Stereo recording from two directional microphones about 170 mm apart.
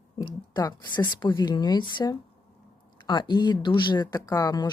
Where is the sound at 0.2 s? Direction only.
25° left (ahead or behind).